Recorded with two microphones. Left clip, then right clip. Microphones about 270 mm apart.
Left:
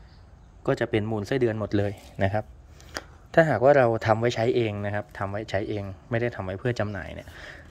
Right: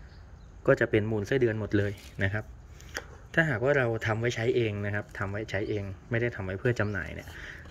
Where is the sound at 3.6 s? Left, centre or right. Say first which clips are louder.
Left 8 dB; centre.